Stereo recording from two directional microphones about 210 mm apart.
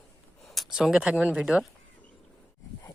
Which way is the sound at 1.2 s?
5° right (ahead or behind).